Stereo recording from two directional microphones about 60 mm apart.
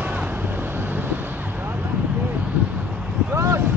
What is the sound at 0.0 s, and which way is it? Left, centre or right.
Vehicle, right.